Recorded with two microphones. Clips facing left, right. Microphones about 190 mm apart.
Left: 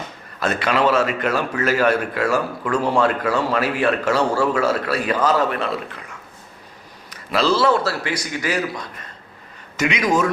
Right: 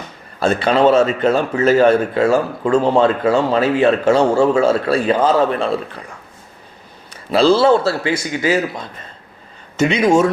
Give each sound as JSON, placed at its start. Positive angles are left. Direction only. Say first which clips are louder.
{"t": 0.3, "sound": "speech", "louder": "right 5 dB", "side_deg": -30}